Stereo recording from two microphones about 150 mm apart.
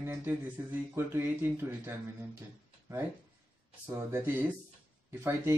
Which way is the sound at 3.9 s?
15° right (ahead or behind).